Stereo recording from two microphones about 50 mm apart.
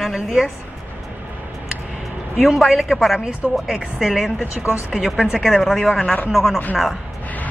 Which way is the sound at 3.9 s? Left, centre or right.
Centre.